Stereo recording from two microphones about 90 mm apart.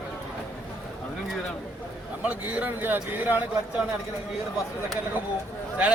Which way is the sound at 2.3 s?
15° right (ahead or behind).